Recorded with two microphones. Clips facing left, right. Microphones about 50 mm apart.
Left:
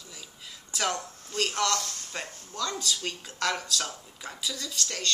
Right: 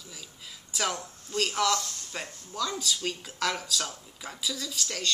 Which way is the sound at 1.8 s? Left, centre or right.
Left.